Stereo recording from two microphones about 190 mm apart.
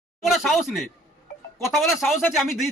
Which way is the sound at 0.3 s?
Centre (ahead or behind).